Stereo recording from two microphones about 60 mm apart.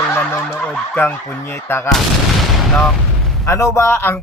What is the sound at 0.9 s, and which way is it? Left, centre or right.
Speech, left.